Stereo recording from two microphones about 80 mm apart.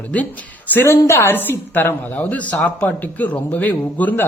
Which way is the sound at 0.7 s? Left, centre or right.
Left.